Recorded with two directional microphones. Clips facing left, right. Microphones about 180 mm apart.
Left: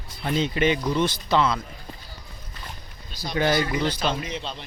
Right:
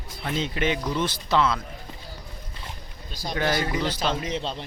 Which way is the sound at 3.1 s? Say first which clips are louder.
Left 3 dB; 45° right (ahead or behind).